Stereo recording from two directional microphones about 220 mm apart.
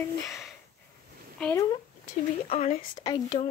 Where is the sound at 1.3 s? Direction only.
5° left (ahead or behind).